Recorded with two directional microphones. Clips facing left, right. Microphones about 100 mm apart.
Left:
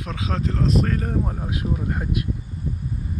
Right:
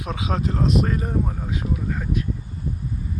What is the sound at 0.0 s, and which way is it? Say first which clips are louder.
Speech: right 1 dB; 10° right (ahead or behind).